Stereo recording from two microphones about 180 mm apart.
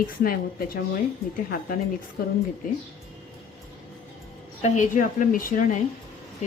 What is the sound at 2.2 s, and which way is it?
Speech, 55° left (ahead or behind).